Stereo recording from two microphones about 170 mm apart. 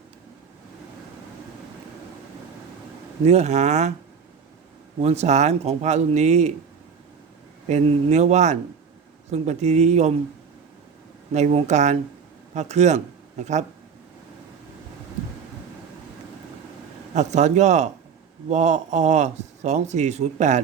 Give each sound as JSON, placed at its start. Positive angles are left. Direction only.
{"t": 3.2, "sound": "speech", "side_deg": -40}
{"t": 5.0, "sound": "speech", "side_deg": -40}
{"t": 7.7, "sound": "speech", "side_deg": -40}
{"t": 11.3, "sound": "speech", "side_deg": -40}
{"t": 17.2, "sound": "speech", "side_deg": -45}